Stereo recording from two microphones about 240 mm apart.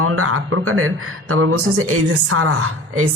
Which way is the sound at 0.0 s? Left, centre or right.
Right.